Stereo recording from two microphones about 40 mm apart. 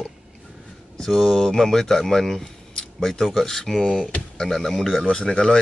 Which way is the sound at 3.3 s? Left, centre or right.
Centre.